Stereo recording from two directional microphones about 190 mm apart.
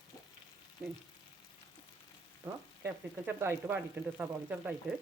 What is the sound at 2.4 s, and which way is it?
Speech, 10° right (ahead or behind).